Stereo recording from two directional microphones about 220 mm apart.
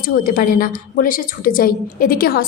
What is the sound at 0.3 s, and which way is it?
A woman's voice, 40° left (ahead or behind).